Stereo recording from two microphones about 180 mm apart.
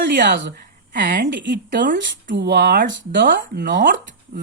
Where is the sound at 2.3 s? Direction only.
65° right (ahead or behind).